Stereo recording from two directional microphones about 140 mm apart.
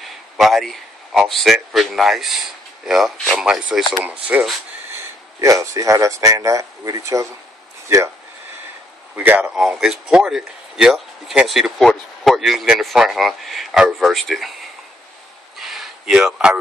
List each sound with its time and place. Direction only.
0.4 s speech: centre (ahead or behind)
5.4 s speech: 25° right (ahead or behind)
9.1 s speech: 10° right (ahead or behind)
15.6 s a sound: centre (ahead or behind)